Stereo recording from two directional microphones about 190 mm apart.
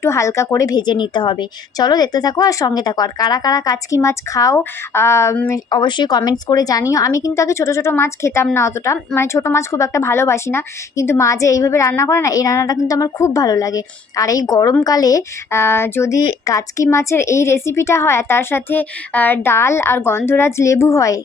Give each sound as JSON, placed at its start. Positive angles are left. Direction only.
{"t": 0.0, "sound": "a woman's voice", "side_deg": 15}